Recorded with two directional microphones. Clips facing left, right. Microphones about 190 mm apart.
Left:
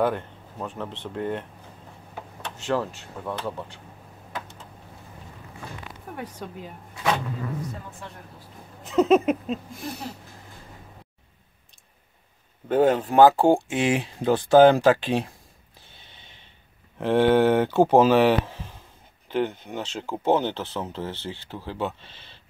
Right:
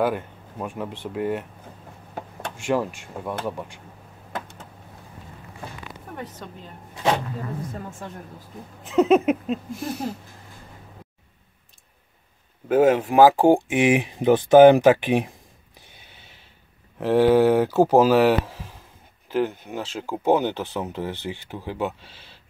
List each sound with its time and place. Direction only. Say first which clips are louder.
0.0 s speech: right 1 dB; 10° right (ahead or behind)
2.5 s speech: right 2 dB; 15° right (ahead or behind)
6.1 s speech: left 1 dB; 10° left (ahead or behind)
8.8 s speech: right 1 dB; centre (ahead or behind)
12.6 s speech: right 2 dB; 5° right (ahead or behind)
15.9 s a sound: left 1 dB; 10° right (ahead or behind)
17.0 s speech: right 2 dB; 5° right (ahead or behind)